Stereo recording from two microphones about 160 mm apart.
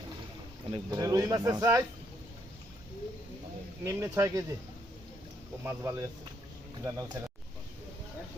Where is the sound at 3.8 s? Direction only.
20° right (ahead or behind).